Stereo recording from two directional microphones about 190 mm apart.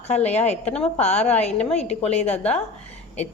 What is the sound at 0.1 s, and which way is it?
Speech, 35° left (ahead or behind).